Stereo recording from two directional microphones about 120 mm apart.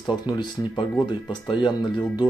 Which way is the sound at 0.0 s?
40° left (ahead or behind).